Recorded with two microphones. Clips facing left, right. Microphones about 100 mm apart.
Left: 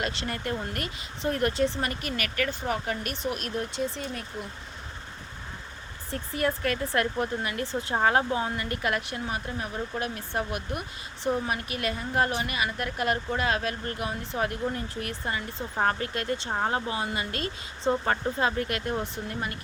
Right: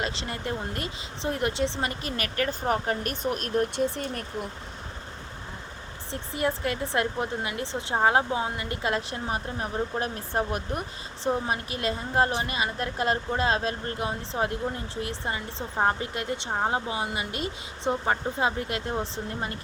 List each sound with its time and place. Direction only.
0.0 s speech: 25° right (ahead or behind); by 4.4 s 50° right (ahead or behind)
6.1 s a woman's voice: 20° right (ahead or behind)